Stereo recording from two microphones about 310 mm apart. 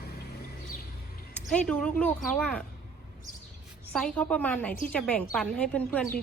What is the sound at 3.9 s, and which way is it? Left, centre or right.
A woman's voice, centre.